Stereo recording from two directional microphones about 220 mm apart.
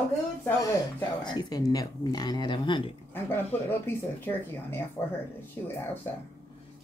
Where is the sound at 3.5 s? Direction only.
10° left (ahead or behind).